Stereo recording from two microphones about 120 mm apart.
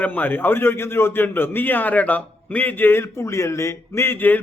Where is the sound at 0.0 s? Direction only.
15° left (ahead or behind).